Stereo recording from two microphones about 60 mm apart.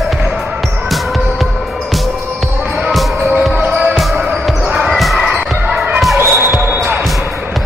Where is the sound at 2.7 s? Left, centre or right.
Centre.